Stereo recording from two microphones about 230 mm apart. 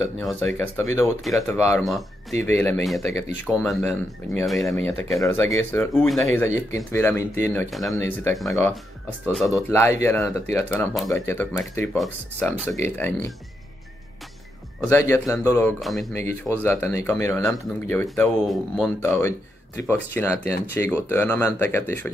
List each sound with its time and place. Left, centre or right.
0.2 s speech: centre
8.3 s speech: centre
9.7 s speech: centre
14.9 s speech: centre
15.8 s speech: centre
19.8 s speech: centre